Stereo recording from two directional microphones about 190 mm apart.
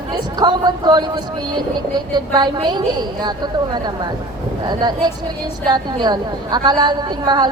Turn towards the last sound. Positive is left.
turn(degrees=-20)  # may be behind; listen again after turning